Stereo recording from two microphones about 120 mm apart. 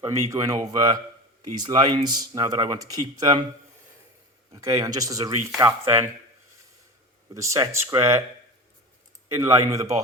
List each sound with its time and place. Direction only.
0.0 s speech: 25° right (ahead or behind)
4.5 s speech: 30° right (ahead or behind)
7.3 s speech: 25° right (ahead or behind)
9.3 s speech: 25° right (ahead or behind)